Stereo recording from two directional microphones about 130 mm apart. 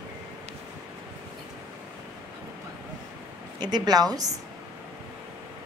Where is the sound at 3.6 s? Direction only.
30° right (ahead or behind).